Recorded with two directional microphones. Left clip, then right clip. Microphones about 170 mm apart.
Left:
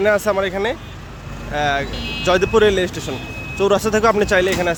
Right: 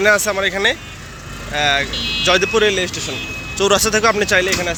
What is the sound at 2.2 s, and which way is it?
Speech, 25° left (ahead or behind).